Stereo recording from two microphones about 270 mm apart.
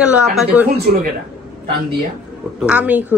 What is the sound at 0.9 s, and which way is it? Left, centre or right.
Speech, right.